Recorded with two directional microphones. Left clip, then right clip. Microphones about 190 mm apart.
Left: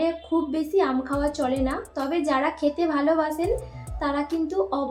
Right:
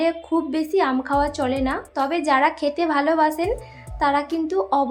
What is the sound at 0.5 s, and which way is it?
A woman's voice, 50° right (ahead or behind).